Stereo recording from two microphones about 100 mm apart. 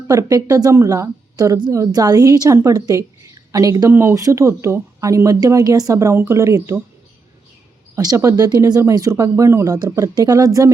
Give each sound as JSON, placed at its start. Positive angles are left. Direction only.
{"t": 0.1, "sound": "speech", "side_deg": -35}
{"t": 7.9, "sound": "speech", "side_deg": -35}
{"t": 8.4, "sound": "speech", "side_deg": -45}
{"t": 8.8, "sound": "speech", "side_deg": -30}